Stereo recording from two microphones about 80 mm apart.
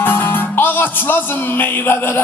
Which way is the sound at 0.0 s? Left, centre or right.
Left.